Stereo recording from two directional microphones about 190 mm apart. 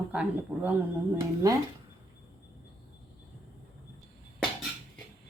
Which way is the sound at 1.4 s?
20° right (ahead or behind).